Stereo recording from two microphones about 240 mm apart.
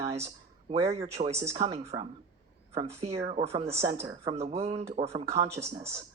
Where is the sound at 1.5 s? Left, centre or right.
Right.